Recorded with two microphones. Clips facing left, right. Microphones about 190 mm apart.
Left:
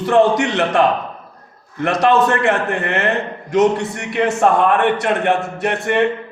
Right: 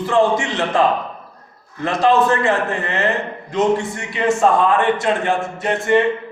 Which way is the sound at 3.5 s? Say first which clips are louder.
Left 3 dB; 65° left (ahead or behind).